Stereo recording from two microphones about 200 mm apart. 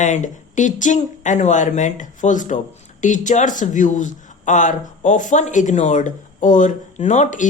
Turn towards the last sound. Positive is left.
turn(degrees=40)  # may be behind; listen again after turning